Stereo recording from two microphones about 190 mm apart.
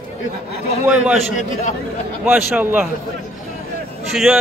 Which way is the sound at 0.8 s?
5° right (ahead or behind).